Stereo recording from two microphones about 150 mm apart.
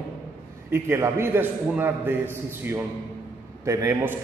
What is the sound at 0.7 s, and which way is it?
A man's voice, 15° right (ahead or behind).